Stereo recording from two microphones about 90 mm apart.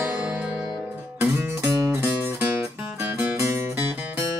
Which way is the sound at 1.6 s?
35° right (ahead or behind).